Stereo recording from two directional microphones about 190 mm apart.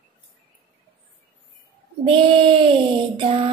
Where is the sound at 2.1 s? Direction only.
25° right (ahead or behind).